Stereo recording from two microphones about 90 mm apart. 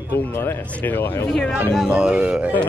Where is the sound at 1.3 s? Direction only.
5° left (ahead or behind).